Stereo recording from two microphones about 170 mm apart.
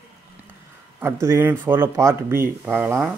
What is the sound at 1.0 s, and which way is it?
Speech, 15° right (ahead or behind).